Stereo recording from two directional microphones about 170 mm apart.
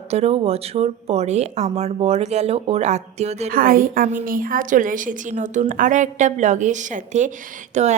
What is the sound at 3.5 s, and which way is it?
A woman's voice, 55° right (ahead or behind).